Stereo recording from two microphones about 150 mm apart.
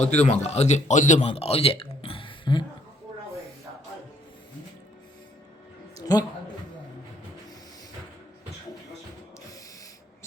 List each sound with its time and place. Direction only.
0.0 s speech: 50° left (ahead or behind)
1.3 s speech: 40° left (ahead or behind)